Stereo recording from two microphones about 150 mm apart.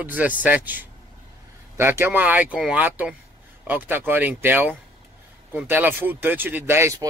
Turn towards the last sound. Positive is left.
turn(degrees=-15)  # may be behind; listen again after turning